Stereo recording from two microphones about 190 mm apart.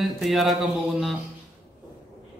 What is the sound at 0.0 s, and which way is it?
A man's voice, centre (ahead or behind).